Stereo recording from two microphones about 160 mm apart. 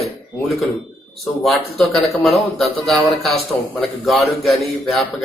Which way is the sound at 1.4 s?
Centre (ahead or behind).